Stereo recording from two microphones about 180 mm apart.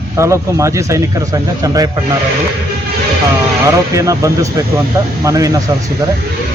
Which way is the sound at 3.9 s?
15° right (ahead or behind).